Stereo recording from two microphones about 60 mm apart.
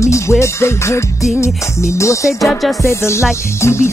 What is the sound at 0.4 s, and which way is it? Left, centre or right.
Music, left.